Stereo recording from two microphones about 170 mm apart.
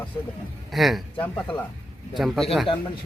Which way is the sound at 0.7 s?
Centre (ahead or behind).